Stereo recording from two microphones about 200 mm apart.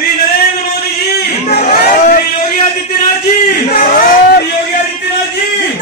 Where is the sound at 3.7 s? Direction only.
45° left (ahead or behind).